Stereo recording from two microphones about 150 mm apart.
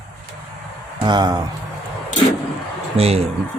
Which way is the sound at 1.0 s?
30° right (ahead or behind).